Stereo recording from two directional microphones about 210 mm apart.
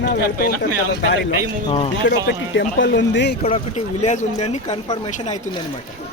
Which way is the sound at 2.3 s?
55° left (ahead or behind).